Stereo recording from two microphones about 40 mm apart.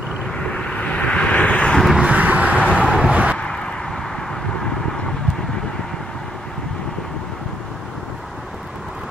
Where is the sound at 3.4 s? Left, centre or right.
Left.